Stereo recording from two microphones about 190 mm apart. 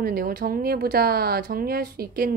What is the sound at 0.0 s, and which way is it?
A woman's voice, 50° right (ahead or behind).